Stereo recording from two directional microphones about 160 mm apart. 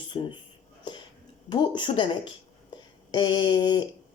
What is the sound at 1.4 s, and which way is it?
Speech, 30° left (ahead or behind).